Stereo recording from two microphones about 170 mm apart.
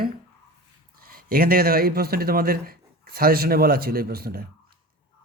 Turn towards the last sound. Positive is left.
turn(degrees=-60)  # may be behind; listen again after turning